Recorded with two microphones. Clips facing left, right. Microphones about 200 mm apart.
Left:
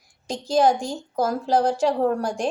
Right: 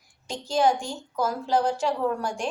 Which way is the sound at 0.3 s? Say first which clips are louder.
Left 4 dB; 40° left (ahead or behind).